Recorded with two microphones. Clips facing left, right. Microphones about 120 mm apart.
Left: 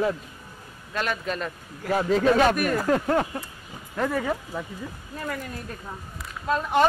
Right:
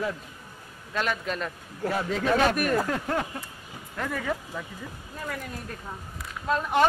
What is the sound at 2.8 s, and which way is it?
Speech, 45° left (ahead or behind).